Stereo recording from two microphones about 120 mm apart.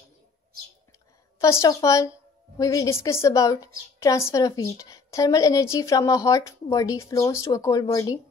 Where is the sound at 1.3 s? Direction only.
25° left (ahead or behind).